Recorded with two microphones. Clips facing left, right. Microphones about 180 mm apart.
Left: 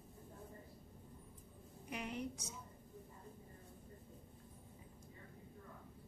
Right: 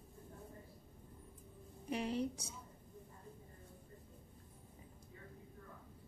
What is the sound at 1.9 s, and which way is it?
Speech, 30° right (ahead or behind).